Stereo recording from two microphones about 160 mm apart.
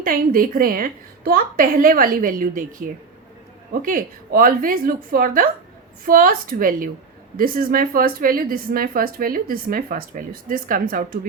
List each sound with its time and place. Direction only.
0.0 s a woman's voice: 60° right (ahead or behind)